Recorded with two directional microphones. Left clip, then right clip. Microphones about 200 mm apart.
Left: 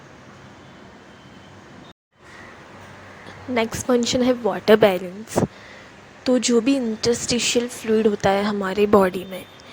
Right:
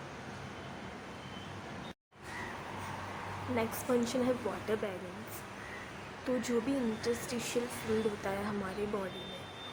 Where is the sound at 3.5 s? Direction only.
40° left (ahead or behind).